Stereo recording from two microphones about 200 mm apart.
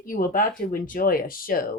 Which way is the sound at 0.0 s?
45° left (ahead or behind).